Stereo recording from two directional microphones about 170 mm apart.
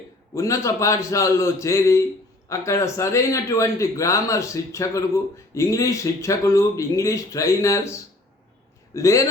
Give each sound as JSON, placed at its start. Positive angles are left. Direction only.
{"t": 0.3, "sound": "a man's voice", "side_deg": 20}